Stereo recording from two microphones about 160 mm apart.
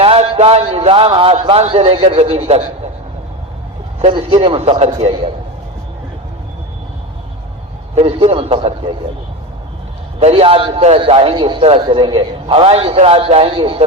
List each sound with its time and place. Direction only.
0.0 s a man's voice: 40° right (ahead or behind)
4.1 s a man's voice: 30° right (ahead or behind)
7.9 s a man's voice: 35° right (ahead or behind)
10.2 s a man's voice: 40° right (ahead or behind)